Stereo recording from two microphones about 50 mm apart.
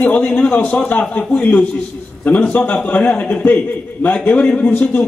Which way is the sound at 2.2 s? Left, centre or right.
Left.